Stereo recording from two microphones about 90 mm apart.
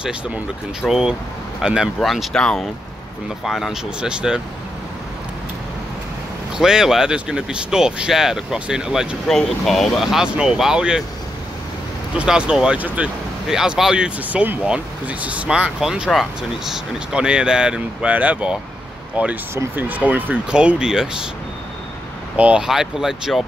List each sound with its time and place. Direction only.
0.8 s speech: 5° right (ahead or behind)
2.0 s speech: 5° left (ahead or behind)
3.4 s speech: centre (ahead or behind)
6.6 s speech: 5° right (ahead or behind)
12.2 s speech: 10° right (ahead or behind)
22.4 s speech: 10° right (ahead or behind)